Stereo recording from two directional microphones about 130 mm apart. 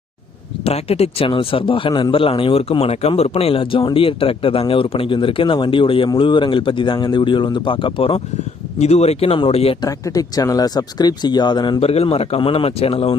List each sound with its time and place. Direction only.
0.6 s a man's voice: 50° left (ahead or behind)
8.8 s a man's voice: 55° left (ahead or behind)
9.8 s speech: 30° left (ahead or behind)
11.8 s a man's voice: 50° left (ahead or behind)